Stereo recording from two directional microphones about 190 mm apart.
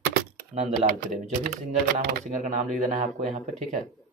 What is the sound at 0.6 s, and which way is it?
Speech, 35° right (ahead or behind).